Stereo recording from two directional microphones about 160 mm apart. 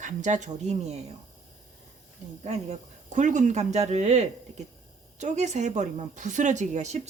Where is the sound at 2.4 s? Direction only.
40° right (ahead or behind).